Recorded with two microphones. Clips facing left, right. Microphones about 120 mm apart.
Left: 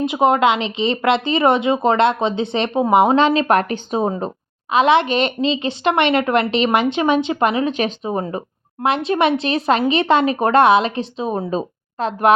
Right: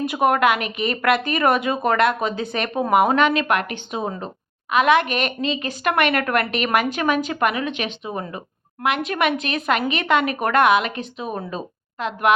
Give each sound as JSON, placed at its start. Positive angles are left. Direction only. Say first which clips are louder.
{"t": 0.0, "sound": "a woman's voice", "louder": "left 3 dB", "side_deg": 20}